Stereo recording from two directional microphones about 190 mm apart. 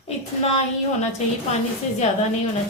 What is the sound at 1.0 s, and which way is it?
Speech, 35° left (ahead or behind).